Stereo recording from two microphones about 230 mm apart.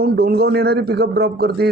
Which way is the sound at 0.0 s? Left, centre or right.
Right.